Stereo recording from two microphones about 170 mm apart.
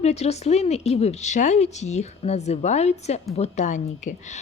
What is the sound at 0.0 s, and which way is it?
A woman's voice, 40° left (ahead or behind).